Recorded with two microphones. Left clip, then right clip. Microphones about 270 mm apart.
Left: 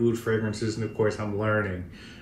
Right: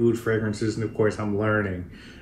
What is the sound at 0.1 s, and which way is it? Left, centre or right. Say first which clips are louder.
Speech: right 2 dB; centre.